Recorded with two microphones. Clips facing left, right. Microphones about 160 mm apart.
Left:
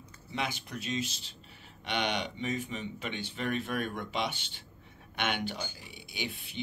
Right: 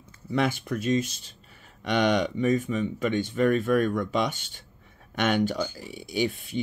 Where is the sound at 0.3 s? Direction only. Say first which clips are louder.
Right 10 dB; 50° right (ahead or behind).